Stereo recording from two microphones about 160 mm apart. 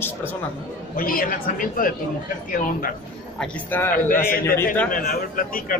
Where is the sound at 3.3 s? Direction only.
10° left (ahead or behind).